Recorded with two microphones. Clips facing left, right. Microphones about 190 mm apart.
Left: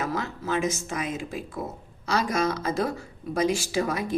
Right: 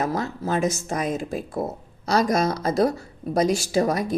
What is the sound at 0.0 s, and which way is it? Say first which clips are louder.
Speech: right 4 dB; 35° right (ahead or behind).